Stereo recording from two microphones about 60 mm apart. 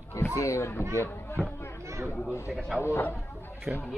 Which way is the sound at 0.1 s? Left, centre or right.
Left.